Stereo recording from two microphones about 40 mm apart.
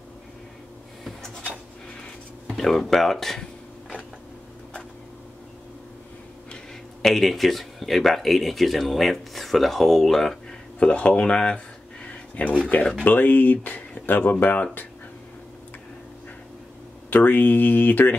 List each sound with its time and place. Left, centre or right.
2.5 s speech: centre
7.0 s speech: centre
10.8 s speech: left
12.1 s a sound: left
13.0 s speech: left
17.1 s speech: left